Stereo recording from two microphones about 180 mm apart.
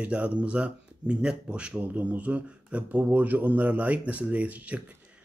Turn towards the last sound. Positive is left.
turn(degrees=-10)  # may be behind; listen again after turning